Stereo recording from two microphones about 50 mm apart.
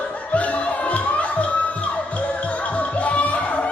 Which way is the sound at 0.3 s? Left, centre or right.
Left.